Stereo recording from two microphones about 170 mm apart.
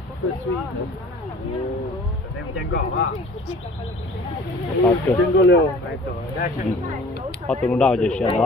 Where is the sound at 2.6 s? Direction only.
90° left.